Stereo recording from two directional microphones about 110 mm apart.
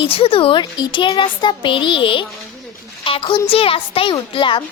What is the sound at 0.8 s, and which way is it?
A child's voice, 45° left (ahead or behind).